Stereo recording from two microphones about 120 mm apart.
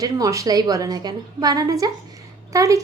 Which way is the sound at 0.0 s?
30° right (ahead or behind).